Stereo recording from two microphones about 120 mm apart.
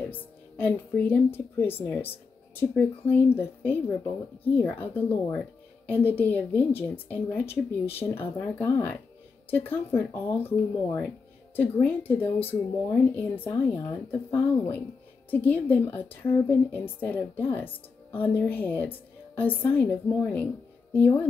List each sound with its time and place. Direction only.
0.1 s a woman's voice: 15° left (ahead or behind)